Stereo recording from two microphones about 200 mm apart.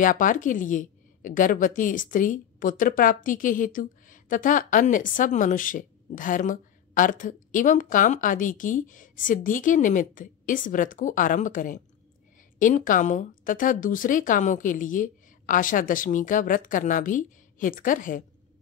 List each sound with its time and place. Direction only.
0.0 s a woman's voice: 40° left (ahead or behind)